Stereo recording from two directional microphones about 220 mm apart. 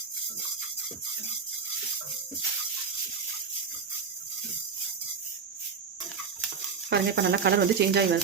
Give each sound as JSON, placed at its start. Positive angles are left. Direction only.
{"t": 6.9, "sound": "speech", "side_deg": -50}